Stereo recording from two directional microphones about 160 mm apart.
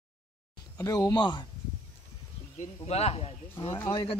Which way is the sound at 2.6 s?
40° left (ahead or behind).